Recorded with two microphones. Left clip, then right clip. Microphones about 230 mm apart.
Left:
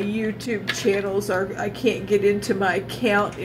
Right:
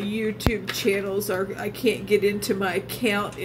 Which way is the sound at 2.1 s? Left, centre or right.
Right.